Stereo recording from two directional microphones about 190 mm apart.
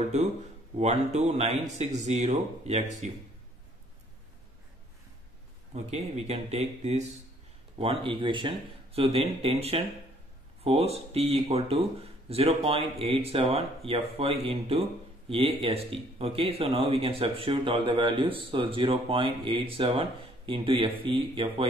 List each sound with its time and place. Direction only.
0.7 s a man's voice: 35° right (ahead or behind)
5.9 s a man's voice: 35° right (ahead or behind)